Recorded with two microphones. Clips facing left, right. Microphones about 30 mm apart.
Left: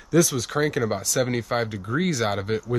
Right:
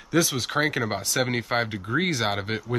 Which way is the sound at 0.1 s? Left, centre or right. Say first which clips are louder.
Left 2 dB; right.